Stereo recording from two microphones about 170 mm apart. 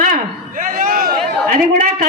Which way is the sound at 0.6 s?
55° right (ahead or behind).